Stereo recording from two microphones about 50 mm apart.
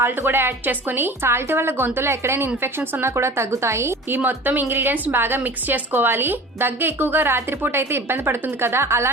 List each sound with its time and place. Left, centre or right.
0.0 s a woman's voice: right
4.7 s a woman's voice: right